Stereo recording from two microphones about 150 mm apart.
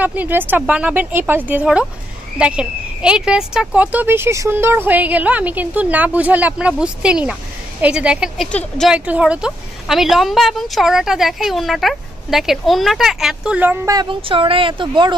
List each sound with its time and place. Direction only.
0.0 s speech: 10° right (ahead or behind)
8.5 s speech: 5° left (ahead or behind)
8.9 s speech: 10° right (ahead or behind)
14.2 s speech: 35° right (ahead or behind)